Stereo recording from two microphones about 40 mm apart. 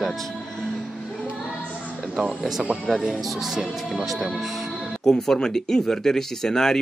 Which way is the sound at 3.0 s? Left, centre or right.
Centre.